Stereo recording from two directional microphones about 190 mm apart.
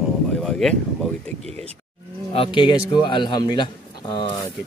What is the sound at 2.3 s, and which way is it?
Speech, 25° left (ahead or behind).